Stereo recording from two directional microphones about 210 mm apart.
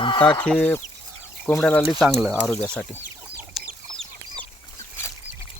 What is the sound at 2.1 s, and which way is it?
Speech, 10° right (ahead or behind).